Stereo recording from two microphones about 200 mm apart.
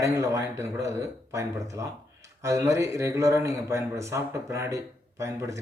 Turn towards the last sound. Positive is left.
turn(degrees=-15)  # may be behind; listen again after turning